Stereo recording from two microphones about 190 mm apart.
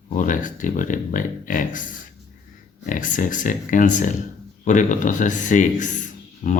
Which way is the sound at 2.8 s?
45° left (ahead or behind).